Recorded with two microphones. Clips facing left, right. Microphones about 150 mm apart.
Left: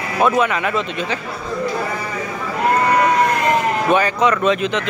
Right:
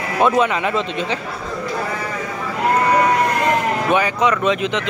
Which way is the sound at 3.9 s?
15° right (ahead or behind).